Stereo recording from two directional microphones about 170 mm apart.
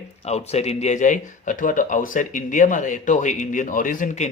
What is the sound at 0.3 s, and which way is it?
Speech, 40° left (ahead or behind).